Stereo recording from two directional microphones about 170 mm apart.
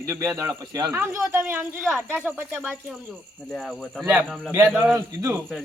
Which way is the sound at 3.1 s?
5° left (ahead or behind).